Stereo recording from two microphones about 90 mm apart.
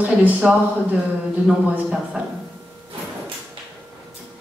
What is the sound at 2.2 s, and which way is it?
Speech, 15° right (ahead or behind).